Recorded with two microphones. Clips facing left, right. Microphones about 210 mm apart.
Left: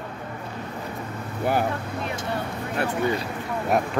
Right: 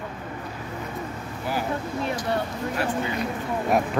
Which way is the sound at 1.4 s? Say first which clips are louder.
Left 6 dB; 55° left (ahead or behind).